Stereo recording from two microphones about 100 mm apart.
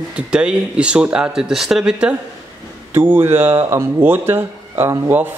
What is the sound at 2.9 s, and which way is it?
Speech, 25° right (ahead or behind).